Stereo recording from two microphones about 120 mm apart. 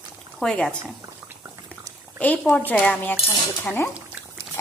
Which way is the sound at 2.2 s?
10° left (ahead or behind).